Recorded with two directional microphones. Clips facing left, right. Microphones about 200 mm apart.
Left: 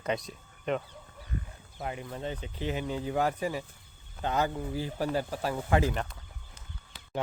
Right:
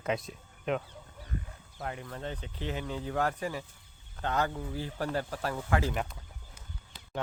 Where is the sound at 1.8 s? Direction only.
15° left (ahead or behind).